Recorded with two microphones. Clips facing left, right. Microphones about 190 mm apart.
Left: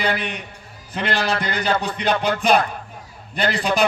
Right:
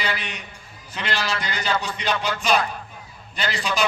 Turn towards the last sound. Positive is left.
turn(degrees=55)  # may be behind; listen again after turning